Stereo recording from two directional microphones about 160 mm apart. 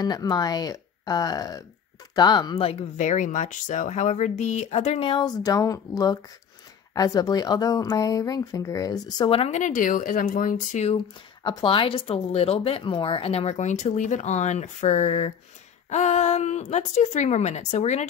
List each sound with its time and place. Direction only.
0.0 s speech: 25° left (ahead or behind)
2.6 s speech: 45° left (ahead or behind)
9.6 s speech: 55° left (ahead or behind)
11.4 s speech: 30° left (ahead or behind)